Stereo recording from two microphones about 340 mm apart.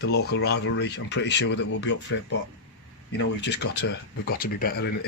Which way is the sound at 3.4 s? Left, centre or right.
Left.